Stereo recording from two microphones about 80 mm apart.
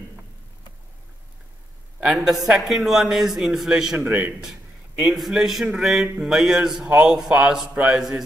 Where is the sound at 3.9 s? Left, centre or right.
Right.